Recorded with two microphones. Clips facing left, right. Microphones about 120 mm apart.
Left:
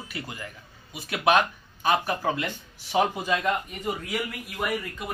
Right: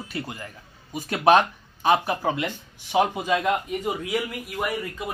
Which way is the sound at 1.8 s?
25° right (ahead or behind).